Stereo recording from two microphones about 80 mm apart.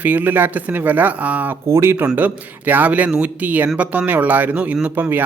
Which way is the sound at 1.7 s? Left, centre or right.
Right.